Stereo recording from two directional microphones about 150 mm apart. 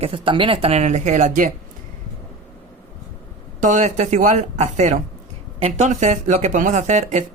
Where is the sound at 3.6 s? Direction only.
55° right (ahead or behind).